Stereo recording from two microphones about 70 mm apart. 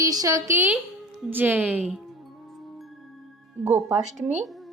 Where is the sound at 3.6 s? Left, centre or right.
Right.